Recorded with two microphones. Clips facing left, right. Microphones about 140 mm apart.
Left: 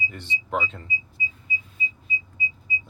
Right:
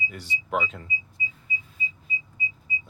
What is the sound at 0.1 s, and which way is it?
Speech, 10° right (ahead or behind).